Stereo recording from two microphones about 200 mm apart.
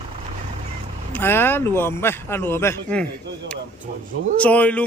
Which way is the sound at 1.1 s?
10° left (ahead or behind).